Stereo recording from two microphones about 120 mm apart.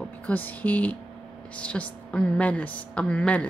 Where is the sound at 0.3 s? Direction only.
15° left (ahead or behind).